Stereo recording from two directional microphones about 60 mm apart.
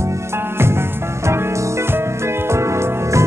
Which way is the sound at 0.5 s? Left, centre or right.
Right.